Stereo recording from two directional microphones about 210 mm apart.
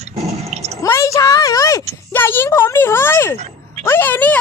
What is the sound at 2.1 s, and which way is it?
Speech, 10° left (ahead or behind).